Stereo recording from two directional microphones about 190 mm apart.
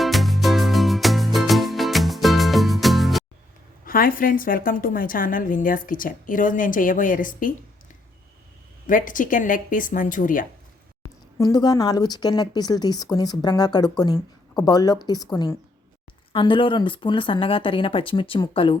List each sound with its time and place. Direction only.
0.0 s music: centre (ahead or behind)
3.8 s a woman's voice: 50° left (ahead or behind)
8.9 s a woman's voice: 45° left (ahead or behind)
11.3 s speech: 20° left (ahead or behind)